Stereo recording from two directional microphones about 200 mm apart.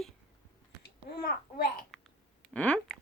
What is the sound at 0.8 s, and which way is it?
Babbling, 50° left (ahead or behind).